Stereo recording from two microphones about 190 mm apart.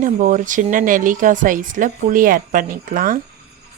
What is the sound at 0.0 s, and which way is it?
Speech, 40° right (ahead or behind).